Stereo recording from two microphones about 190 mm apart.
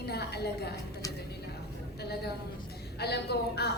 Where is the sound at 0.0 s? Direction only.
60° left (ahead or behind).